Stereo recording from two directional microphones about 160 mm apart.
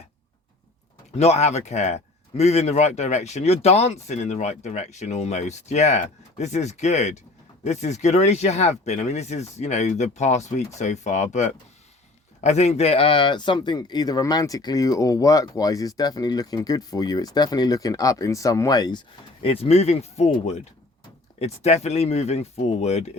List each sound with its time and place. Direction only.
1.1 s a man's voice: 40° left (ahead or behind); by 18.9 s 25° left (ahead or behind)
19.4 s speech: 35° left (ahead or behind)